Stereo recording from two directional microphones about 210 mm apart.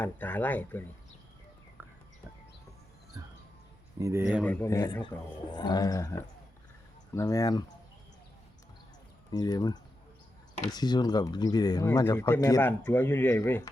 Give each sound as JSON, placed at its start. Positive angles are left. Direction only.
{"t": 0.0, "sound": "speech", "side_deg": 10}
{"t": 1.8, "sound": "bird", "side_deg": -10}
{"t": 4.0, "sound": "speech", "side_deg": -10}
{"t": 4.4, "sound": "speech", "side_deg": 15}
{"t": 9.3, "sound": "speech", "side_deg": 20}